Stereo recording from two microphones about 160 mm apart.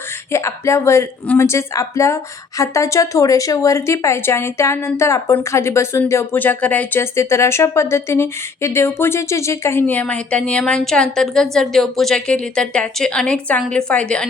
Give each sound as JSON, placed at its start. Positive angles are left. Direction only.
{"t": 0.3, "sound": "a woman's voice", "side_deg": 15}